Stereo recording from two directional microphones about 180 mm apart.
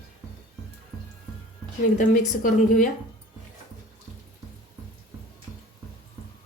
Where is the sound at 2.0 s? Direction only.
45° left (ahead or behind).